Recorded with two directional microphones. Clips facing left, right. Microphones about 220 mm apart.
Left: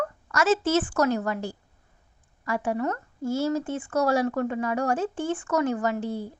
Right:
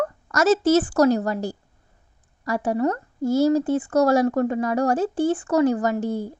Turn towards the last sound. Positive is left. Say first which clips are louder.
# right 4 dB
turn(degrees=-45)  # may be behind; listen again after turning